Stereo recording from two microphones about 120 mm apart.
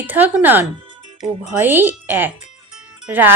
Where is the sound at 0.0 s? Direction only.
15° right (ahead or behind).